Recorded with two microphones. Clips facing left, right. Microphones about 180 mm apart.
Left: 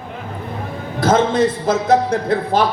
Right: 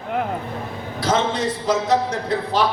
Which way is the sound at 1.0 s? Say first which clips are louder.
Left 6 dB; 50° left (ahead or behind).